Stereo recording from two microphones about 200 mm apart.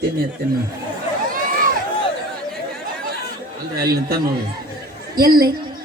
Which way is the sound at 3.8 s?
50° right (ahead or behind).